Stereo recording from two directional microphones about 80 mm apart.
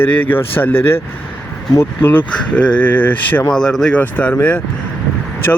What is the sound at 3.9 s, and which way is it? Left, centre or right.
Speech, centre.